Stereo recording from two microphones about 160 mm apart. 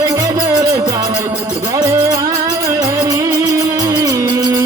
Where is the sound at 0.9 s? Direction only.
20° right (ahead or behind).